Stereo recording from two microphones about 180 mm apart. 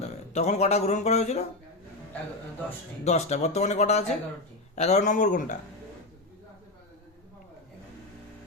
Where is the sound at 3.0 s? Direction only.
40° left (ahead or behind).